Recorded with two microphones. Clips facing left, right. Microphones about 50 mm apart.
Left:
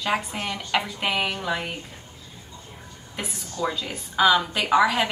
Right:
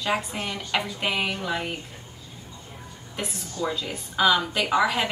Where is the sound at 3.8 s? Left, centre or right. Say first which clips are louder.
Left 2 dB; centre.